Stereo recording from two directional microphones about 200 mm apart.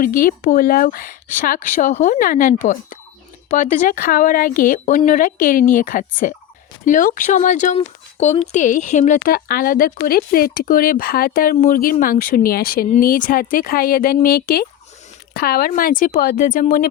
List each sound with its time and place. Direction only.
0.0 s speech: 45° left (ahead or behind)